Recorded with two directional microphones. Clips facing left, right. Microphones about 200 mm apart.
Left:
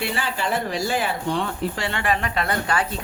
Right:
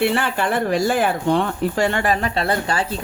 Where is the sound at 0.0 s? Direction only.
60° right (ahead or behind).